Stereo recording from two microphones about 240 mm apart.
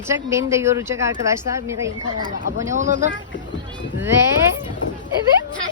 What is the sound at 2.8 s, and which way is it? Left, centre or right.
Speech, right.